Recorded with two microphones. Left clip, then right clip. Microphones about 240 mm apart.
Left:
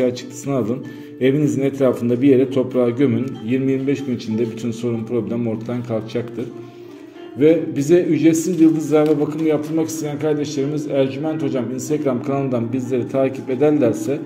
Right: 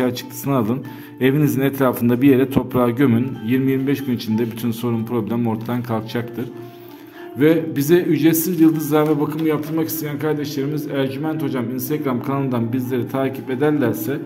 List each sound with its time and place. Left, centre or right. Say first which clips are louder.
0.0 s a man's voice: left 2 dB; right
7.3 s a man's voice: left 1 dB; right